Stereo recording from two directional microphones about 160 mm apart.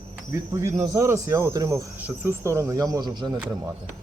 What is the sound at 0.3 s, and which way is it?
Speech, 20° right (ahead or behind).